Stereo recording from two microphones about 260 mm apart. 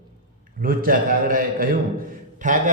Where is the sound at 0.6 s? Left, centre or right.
Right.